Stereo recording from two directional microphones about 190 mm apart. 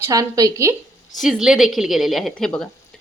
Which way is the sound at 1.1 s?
Centre (ahead or behind).